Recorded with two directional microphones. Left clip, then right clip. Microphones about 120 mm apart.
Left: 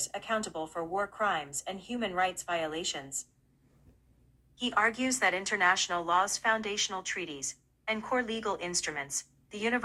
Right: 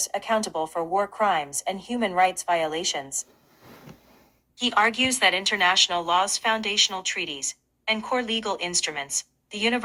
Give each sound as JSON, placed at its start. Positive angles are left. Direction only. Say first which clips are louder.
{"t": 0.0, "sound": "a woman's voice", "louder": "right 8 dB", "side_deg": -35}
{"t": 4.7, "sound": "a woman's voice", "louder": "right 7 dB", "side_deg": -35}